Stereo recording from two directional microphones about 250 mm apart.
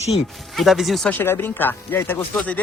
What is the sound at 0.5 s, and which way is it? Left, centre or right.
Speech, centre.